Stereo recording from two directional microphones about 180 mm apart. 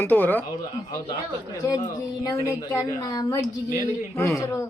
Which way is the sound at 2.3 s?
20° left (ahead or behind).